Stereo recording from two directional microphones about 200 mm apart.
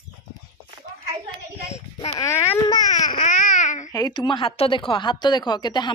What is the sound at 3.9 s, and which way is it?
Speech, 20° left (ahead or behind).